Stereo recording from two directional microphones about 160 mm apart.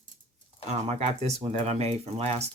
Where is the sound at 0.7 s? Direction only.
40° right (ahead or behind).